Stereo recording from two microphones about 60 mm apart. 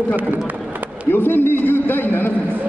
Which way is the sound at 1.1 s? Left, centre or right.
Left.